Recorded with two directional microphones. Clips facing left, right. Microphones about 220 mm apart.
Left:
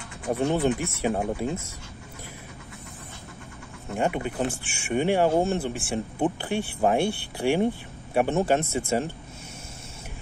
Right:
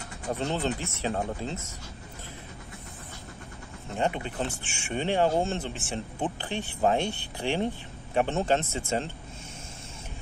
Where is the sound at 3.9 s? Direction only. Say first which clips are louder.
Left 3 dB; 10° left (ahead or behind).